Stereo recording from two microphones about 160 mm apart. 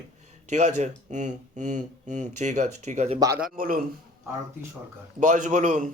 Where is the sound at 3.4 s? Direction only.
60° right (ahead or behind).